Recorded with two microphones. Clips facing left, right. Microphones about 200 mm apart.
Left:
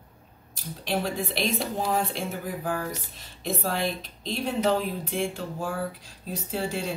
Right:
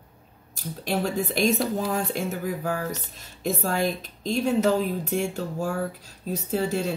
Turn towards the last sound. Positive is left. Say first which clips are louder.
# right 4 dB
turn(degrees=-45)  # may be behind; listen again after turning